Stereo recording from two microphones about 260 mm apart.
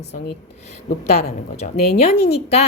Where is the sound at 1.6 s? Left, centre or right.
Left.